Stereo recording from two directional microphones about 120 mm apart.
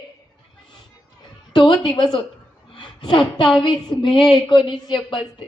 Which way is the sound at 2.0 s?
40° left (ahead or behind).